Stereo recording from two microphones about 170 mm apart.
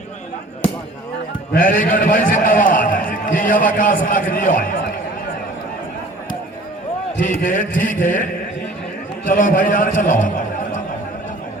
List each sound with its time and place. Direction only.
1.5 s a man's voice: 55° left (ahead or behind)
7.2 s a man's voice: 50° left (ahead or behind)